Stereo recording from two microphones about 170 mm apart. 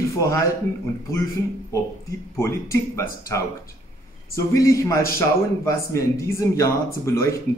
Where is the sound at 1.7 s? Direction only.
15° left (ahead or behind).